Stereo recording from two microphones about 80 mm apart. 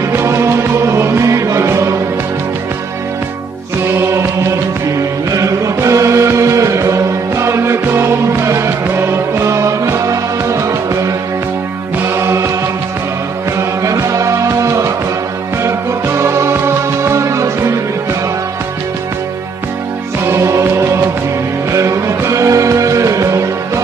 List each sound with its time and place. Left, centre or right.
0.1 s music: right
3.9 s music: right
12.1 s music: right
13.6 s music: right
16.2 s music: right
20.2 s music: right